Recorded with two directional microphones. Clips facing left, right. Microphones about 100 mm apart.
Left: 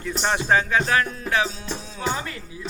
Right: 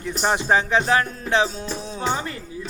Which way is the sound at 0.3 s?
20° right (ahead or behind).